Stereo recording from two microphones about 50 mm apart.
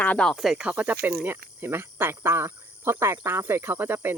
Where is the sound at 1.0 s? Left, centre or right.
Right.